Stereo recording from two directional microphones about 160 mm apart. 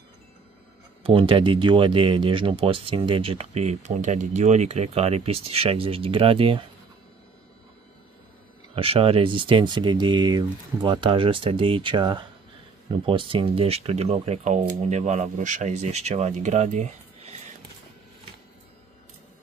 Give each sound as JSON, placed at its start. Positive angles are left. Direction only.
{"t": 1.0, "sound": "speech", "side_deg": -35}
{"t": 8.7, "sound": "speech", "side_deg": -35}